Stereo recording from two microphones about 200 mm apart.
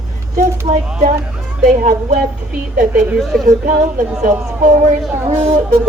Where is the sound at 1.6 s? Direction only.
35° right (ahead or behind).